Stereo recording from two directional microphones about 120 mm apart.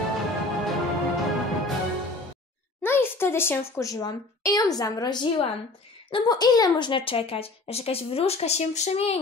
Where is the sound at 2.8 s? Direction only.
20° left (ahead or behind).